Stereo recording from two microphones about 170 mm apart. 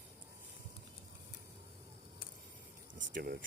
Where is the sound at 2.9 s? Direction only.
60° right (ahead or behind).